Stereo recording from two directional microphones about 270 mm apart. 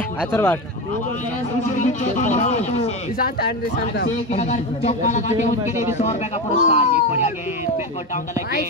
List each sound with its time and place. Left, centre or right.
0.2 s speech: centre
1.8 s speech: left
3.4 s speech: left
5.6 s speech: centre
6.6 s speech: left